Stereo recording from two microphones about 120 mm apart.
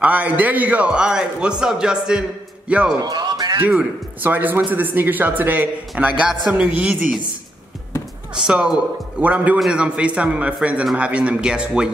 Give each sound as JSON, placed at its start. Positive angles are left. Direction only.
{"t": 0.0, "sound": "a man's voice", "side_deg": -10}
{"t": 3.0, "sound": "music", "side_deg": -35}
{"t": 3.6, "sound": "speech", "side_deg": -15}
{"t": 8.4, "sound": "speech", "side_deg": -5}